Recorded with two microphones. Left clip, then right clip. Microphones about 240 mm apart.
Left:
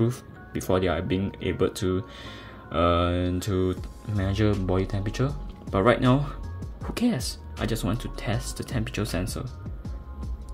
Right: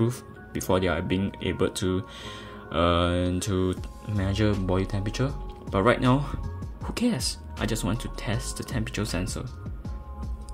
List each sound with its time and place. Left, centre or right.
0.0 s speech: centre